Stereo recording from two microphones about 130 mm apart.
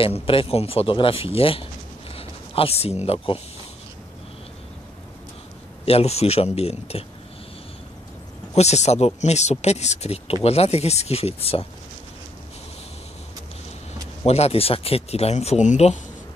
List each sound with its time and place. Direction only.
0.0 s speech: 45° left (ahead or behind)
2.1 s a sound: 50° left (ahead or behind)
3.1 s speech: 50° left (ahead or behind)
5.9 s speech: 50° left (ahead or behind)
8.5 s speech: 60° left (ahead or behind)
14.2 s speech: 55° left (ahead or behind)